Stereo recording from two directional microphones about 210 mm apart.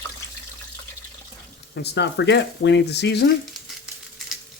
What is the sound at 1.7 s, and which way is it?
Speech, 55° left (ahead or behind).